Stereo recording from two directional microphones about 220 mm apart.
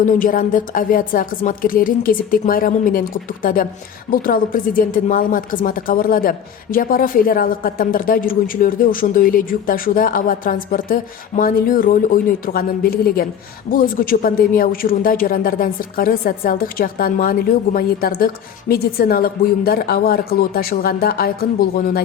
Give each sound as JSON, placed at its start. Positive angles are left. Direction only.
{"t": 0.0, "sound": "a woman's voice", "side_deg": 40}